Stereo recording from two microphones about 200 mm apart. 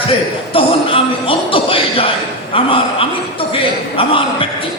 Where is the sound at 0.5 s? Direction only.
25° left (ahead or behind).